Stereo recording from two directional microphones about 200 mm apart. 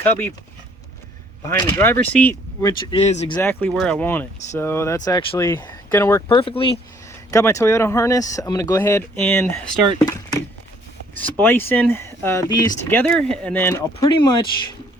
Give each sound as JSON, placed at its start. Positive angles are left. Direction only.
{"t": 0.0, "sound": "speech", "side_deg": 10}
{"t": 1.5, "sound": "speech", "side_deg": 10}
{"t": 2.6, "sound": "speech", "side_deg": 20}
{"t": 3.0, "sound": "speech", "side_deg": 35}
{"t": 3.3, "sound": "speech", "side_deg": 10}
{"t": 6.2, "sound": "speech", "side_deg": 25}
{"t": 7.3, "sound": "speech", "side_deg": 15}
{"t": 11.2, "sound": "speech", "side_deg": 10}